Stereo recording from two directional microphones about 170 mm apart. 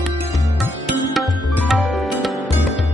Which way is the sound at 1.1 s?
Centre (ahead or behind).